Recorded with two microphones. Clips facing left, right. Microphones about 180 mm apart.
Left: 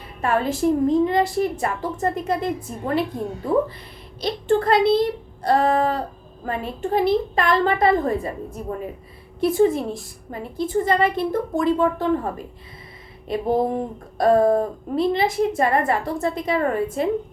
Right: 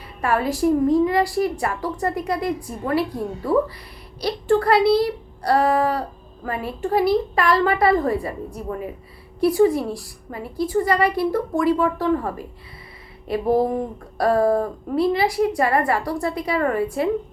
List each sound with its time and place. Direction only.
0.2 s speech: 25° left (ahead or behind)